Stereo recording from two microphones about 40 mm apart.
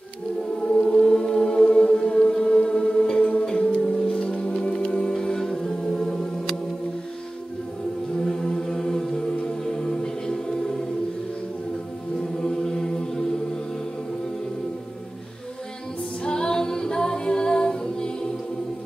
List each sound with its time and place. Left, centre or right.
0.7 s music: centre
5.1 s music: centre
8.2 s music: centre
12.4 s mantra: centre
16.3 s a capella: centre